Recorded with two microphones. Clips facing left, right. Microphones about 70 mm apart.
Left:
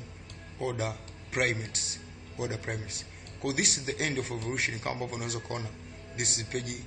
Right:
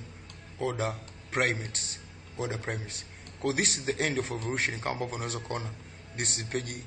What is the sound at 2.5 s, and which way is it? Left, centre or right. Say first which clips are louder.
A man's voice: right 1 dB; centre.